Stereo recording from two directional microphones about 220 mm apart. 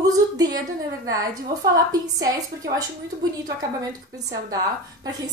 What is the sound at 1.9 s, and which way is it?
Speech, 15° right (ahead or behind).